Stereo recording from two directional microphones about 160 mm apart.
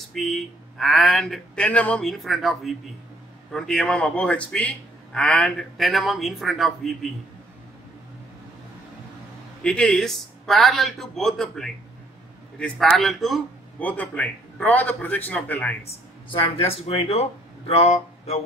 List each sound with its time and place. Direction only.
0.1 s speech: centre (ahead or behind)
9.6 s a man's voice: 5° left (ahead or behind)
15.9 s speech: 35° left (ahead or behind)